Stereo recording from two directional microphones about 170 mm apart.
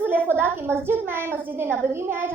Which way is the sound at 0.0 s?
10° right (ahead or behind).